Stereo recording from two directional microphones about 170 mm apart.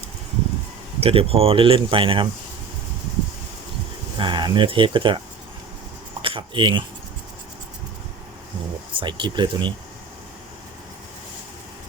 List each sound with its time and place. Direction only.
0.9 s speech: 35° right (ahead or behind)
4.2 s speech: 25° right (ahead or behind)
6.2 s speech: 30° right (ahead or behind)
8.9 s speech: 30° right (ahead or behind)